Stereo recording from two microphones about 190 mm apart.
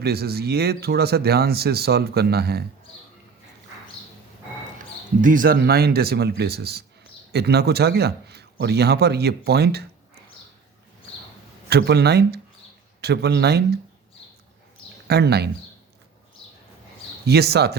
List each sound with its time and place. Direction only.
0.0 s speech: 55° right (ahead or behind)
5.2 s speech: 45° right (ahead or behind)
11.7 s speech: 60° right (ahead or behind)
15.0 s speech: 60° right (ahead or behind)
17.2 s speech: 60° right (ahead or behind)